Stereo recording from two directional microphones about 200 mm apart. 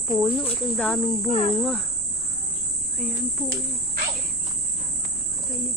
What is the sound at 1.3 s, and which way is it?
Speech, 30° left (ahead or behind).